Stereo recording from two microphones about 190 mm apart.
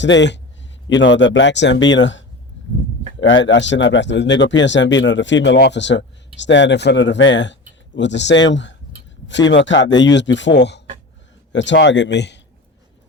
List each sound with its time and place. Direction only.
0.0 s speech: 70° left (ahead or behind)